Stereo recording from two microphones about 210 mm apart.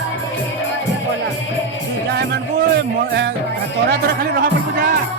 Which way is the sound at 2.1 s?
50° right (ahead or behind).